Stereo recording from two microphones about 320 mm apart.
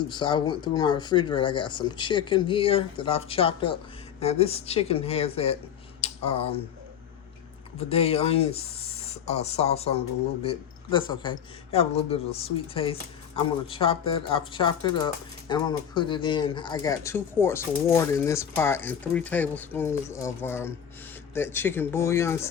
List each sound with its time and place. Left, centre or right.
0.1 s speech: centre
6.0 s a sound: centre
7.8 s speech: centre